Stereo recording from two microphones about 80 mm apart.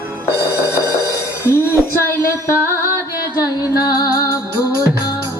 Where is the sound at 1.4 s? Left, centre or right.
Left.